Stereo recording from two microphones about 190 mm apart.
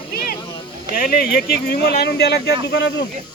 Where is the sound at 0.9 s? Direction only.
50° left (ahead or behind).